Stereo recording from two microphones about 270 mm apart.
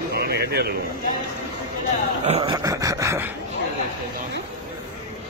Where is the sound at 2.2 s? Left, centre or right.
Right.